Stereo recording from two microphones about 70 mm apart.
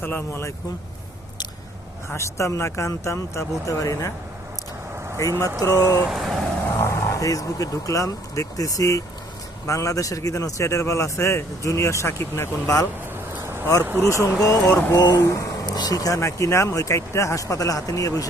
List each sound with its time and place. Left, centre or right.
0.0 s speech: left
2.0 s speech: left
5.2 s speech: left
6.1 s speech: centre
6.8 s speech: left
13.4 s vehicle: right
13.8 s speech: right
14.4 s speech: left
15.6 s speech: left